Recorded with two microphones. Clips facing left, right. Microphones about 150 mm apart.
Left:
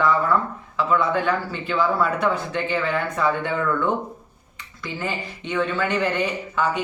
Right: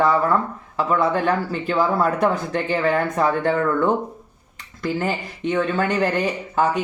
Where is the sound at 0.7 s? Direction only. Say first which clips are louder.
Right 1 dB; 40° right (ahead or behind).